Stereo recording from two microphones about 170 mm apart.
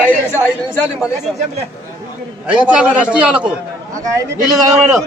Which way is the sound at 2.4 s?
5° right (ahead or behind).